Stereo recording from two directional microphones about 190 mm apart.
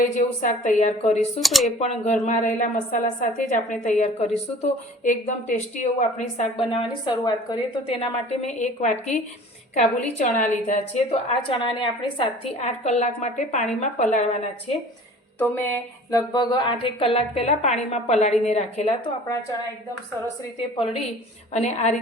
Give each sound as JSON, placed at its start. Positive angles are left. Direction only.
{"t": 0.0, "sound": "a woman's voice", "side_deg": 45}
{"t": 1.4, "sound": "speech", "side_deg": 0}
{"t": 1.8, "sound": "a woman's voice", "side_deg": 35}
{"t": 15.4, "sound": "a woman's voice", "side_deg": 10}
{"t": 21.5, "sound": "a woman's voice", "side_deg": 35}